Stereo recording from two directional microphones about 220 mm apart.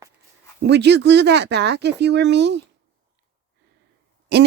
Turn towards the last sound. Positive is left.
turn(degrees=-50)  # may be behind; listen again after turning